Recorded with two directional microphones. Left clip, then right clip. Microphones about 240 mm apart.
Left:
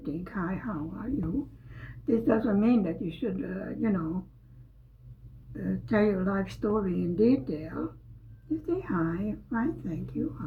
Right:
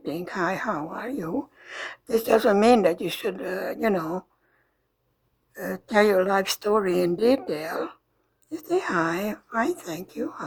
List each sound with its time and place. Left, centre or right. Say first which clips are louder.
0.1 s a woman's voice: right 9 dB; right
5.5 s a woman's voice: right 7 dB; right